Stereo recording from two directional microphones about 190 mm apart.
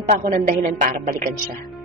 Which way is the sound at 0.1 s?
45° right (ahead or behind).